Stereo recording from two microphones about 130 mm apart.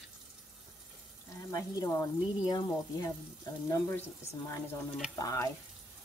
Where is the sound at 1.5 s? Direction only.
25° left (ahead or behind).